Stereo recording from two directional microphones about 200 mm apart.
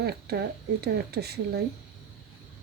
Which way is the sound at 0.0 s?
50° right (ahead or behind).